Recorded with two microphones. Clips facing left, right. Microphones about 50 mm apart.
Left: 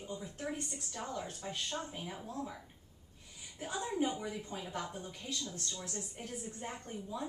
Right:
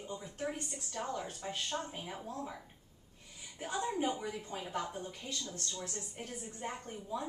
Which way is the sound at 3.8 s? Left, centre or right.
Centre.